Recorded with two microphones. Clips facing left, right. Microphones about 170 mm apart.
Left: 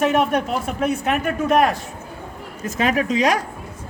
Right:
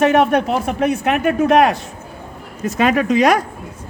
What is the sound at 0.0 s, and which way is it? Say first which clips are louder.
Speech: right 5 dB; 70° right (ahead or behind).